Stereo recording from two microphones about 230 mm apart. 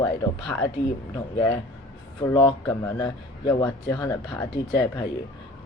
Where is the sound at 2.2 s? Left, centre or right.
Centre.